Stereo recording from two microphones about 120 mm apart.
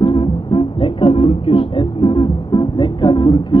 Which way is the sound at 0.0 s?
45° left (ahead or behind).